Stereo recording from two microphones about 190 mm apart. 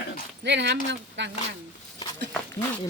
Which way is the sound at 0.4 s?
70° right (ahead or behind).